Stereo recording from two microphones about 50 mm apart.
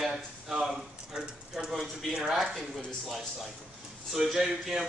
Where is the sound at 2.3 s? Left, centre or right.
Centre.